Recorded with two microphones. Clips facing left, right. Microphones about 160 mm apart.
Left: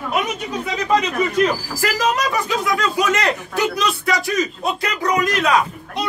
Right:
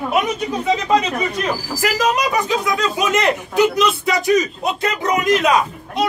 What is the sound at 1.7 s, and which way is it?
A man's voice, 20° right (ahead or behind).